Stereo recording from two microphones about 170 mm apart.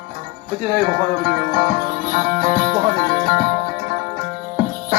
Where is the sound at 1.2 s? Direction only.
60° right (ahead or behind).